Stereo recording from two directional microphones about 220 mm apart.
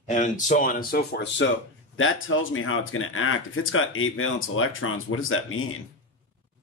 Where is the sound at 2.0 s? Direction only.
65° left (ahead or behind).